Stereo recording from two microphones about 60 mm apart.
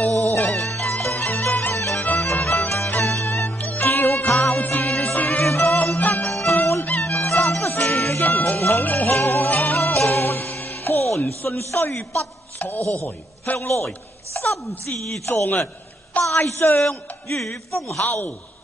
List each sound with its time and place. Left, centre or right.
0.0 s music: left
1.5 s music: left
4.4 s music: left
12.5 s stir: left
12.9 s a man's voice: left
14.3 s a sound: left
15.2 s a woman's voice: left
17.4 s speech: centre
18.0 s a man's voice: left